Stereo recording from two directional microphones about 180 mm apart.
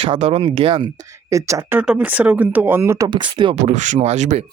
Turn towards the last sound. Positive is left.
turn(degrees=-40)  # may be behind; listen again after turning